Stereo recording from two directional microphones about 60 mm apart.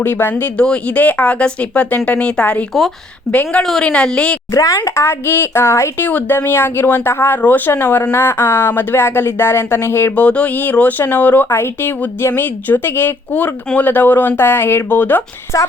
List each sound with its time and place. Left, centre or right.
0.0 s speech: left
0.5 s speech: centre
3.3 s speech: centre
3.6 s a woman's voice: centre
4.5 s speech: left
4.9 s speech: left
6.1 s speech: left
10.2 s speech: left
11.5 s speech: left
12.3 s speech: left
15.5 s speech: left